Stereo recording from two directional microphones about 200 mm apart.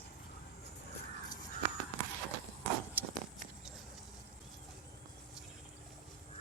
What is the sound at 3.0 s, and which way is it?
Walk, 10° right (ahead or behind).